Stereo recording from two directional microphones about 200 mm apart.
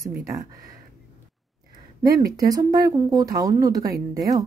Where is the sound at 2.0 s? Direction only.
15° right (ahead or behind).